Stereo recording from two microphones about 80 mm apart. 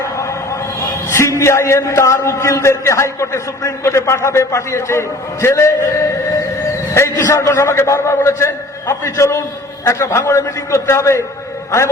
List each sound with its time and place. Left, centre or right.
0.0 s music: left
1.4 s a man's voice: left